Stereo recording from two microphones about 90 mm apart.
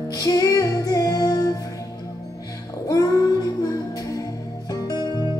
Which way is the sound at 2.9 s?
40° left (ahead or behind).